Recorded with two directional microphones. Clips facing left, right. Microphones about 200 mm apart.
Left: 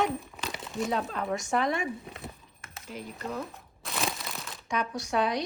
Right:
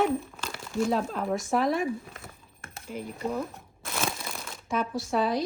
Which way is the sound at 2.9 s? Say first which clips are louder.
Right 5 dB; 10° right (ahead or behind).